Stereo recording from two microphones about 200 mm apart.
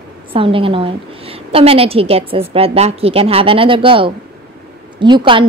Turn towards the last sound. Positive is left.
turn(degrees=-25)  # may be behind; listen again after turning